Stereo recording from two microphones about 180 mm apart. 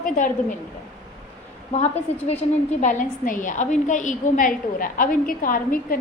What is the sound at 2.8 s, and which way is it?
A woman's voice, 45° left (ahead or behind).